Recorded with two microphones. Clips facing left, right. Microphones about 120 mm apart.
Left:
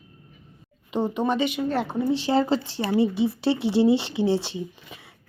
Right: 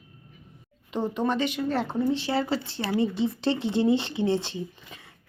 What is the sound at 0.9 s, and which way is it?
Speech, 10° left (ahead or behind).